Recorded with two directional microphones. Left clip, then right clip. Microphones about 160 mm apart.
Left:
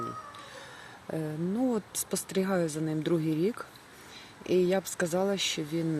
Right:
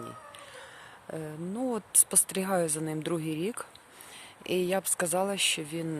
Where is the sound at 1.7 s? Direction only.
30° right (ahead or behind).